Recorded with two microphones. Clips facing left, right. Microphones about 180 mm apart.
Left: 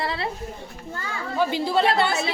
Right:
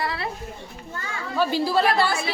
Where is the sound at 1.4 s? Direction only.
20° left (ahead or behind).